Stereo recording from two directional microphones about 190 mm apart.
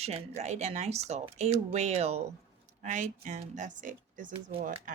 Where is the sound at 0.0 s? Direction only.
35° right (ahead or behind).